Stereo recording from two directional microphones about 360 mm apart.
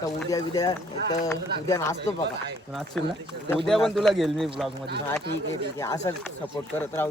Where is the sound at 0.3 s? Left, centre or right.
Centre.